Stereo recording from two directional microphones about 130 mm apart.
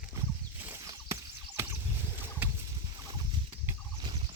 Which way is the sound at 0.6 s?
15° right (ahead or behind).